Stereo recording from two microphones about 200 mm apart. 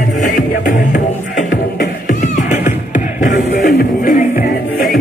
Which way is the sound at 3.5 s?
40° left (ahead or behind).